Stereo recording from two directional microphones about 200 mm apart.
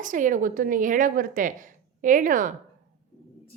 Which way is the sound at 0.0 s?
40° right (ahead or behind).